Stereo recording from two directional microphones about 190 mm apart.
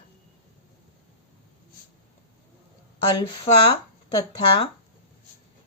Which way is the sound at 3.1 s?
25° left (ahead or behind).